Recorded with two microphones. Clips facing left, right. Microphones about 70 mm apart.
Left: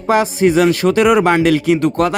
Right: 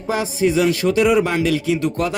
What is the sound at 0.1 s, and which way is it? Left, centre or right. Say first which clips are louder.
Speech: left 6 dB; left.